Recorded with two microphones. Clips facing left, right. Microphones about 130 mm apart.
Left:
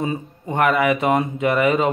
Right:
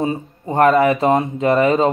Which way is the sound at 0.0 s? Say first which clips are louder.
Right 3 dB; 30° right (ahead or behind).